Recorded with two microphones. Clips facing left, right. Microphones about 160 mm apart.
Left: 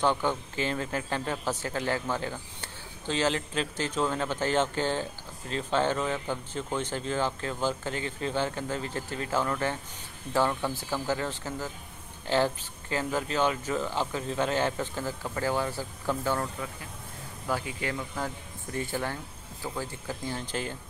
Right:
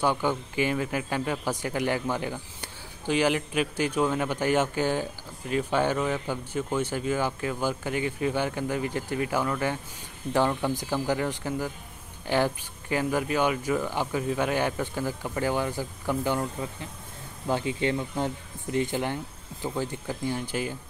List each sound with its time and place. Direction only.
0.0 s speech: 10° right (ahead or behind)